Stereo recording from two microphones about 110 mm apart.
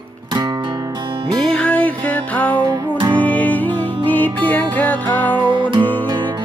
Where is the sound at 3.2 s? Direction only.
15° left (ahead or behind).